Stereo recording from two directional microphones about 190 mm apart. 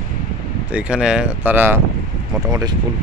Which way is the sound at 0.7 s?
5° right (ahead or behind).